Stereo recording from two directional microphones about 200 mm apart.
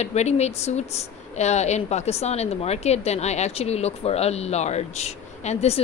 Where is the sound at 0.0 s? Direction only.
35° left (ahead or behind).